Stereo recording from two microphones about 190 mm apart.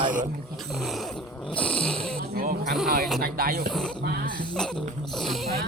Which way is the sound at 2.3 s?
50° right (ahead or behind).